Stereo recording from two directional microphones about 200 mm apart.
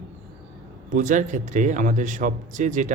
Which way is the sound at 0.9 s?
40° right (ahead or behind).